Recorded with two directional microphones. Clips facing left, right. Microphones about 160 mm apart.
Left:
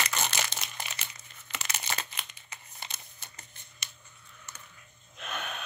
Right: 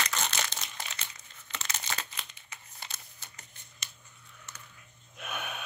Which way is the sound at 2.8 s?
20° left (ahead or behind).